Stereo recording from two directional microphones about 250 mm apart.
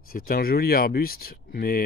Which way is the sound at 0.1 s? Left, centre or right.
Left.